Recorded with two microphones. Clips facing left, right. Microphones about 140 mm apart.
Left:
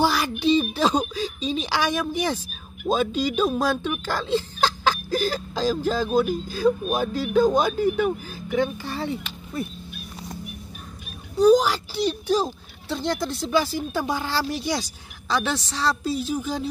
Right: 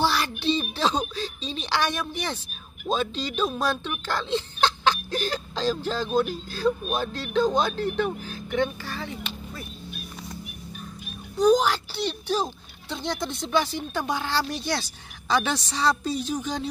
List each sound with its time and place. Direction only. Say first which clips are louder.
0.0 s speech: left 3 dB; 10° left (ahead or behind)
8.8 s speech: left 5 dB; 30° left (ahead or behind)
11.3 s speech: left 3 dB; 5° left (ahead or behind)